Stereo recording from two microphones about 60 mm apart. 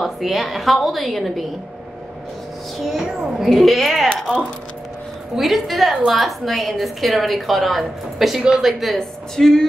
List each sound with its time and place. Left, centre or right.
0.0 s a woman's voice: centre
2.8 s a woman's voice: centre
5.3 s a woman's voice: centre